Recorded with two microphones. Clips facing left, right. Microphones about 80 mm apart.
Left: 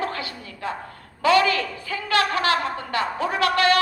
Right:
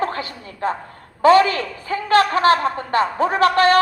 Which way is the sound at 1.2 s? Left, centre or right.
Right.